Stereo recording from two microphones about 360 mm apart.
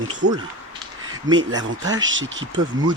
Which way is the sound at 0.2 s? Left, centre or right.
Right.